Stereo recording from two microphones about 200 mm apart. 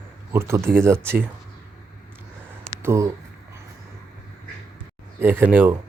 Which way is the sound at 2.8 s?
15° right (ahead or behind).